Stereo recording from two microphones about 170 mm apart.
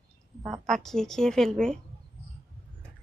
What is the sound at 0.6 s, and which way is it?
A woman's voice, centre (ahead or behind).